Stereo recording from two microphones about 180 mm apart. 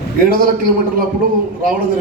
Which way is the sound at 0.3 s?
55° right (ahead or behind).